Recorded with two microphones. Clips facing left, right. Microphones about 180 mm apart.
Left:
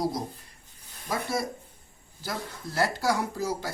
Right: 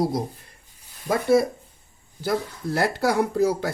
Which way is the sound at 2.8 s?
60° right (ahead or behind).